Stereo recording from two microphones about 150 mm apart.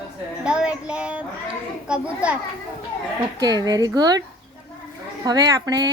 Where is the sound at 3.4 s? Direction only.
25° right (ahead or behind).